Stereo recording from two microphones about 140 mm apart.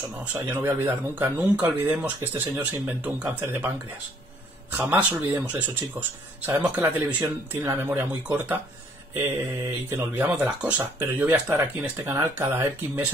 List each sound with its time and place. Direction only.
0.2 s speech: 15° right (ahead or behind)
9.8 s speech: 15° right (ahead or behind)